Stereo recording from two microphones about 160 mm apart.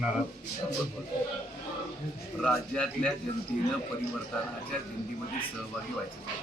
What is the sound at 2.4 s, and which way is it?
Speech, 5° left (ahead or behind).